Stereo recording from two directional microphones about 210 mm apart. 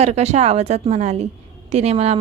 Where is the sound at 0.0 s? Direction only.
30° right (ahead or behind).